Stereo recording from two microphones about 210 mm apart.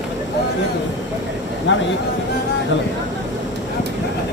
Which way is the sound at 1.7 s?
60° left (ahead or behind).